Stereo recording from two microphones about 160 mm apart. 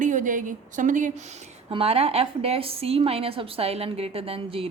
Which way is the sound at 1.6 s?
35° right (ahead or behind).